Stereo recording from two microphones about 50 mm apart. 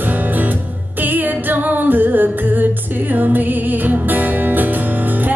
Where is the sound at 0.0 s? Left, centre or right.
Right.